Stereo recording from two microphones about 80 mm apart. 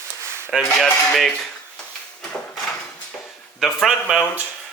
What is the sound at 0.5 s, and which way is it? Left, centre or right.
Speech, centre.